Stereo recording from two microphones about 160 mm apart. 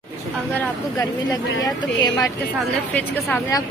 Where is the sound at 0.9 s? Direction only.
20° left (ahead or behind).